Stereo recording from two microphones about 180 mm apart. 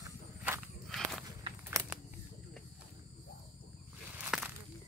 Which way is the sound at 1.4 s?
20° right (ahead or behind).